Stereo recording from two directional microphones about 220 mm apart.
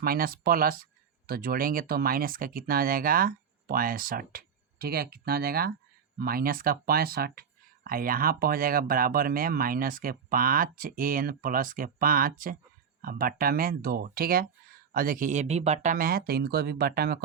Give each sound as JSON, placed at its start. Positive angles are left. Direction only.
{"t": 0.0, "sound": "speech", "side_deg": -40}